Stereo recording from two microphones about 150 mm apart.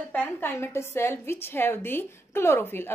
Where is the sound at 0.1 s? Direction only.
15° left (ahead or behind).